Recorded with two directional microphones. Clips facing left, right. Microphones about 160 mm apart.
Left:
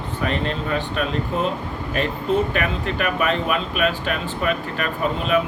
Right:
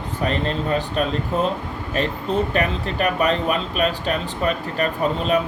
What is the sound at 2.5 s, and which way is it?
Speech, 35° right (ahead or behind).